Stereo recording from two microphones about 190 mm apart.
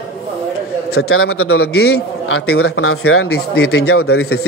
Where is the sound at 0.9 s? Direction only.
90° left.